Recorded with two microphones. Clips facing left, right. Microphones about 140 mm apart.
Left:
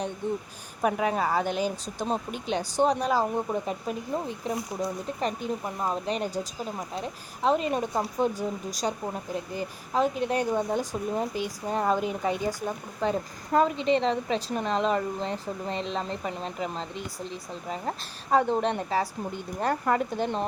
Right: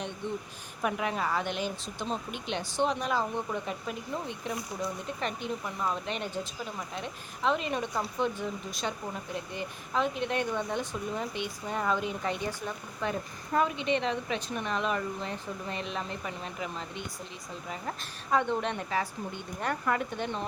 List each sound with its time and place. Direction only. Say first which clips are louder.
0.2 s speech: left 5 dB; 45° left (ahead or behind)
12.0 s a woman's voice: left 5 dB; 5° left (ahead or behind)
12.5 s speech: left 5 dB; 40° left (ahead or behind)